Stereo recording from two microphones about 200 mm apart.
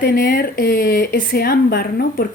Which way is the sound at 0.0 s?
50° left (ahead or behind).